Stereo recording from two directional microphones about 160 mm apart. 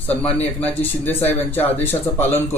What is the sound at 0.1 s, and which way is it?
A man's voice, 10° left (ahead or behind).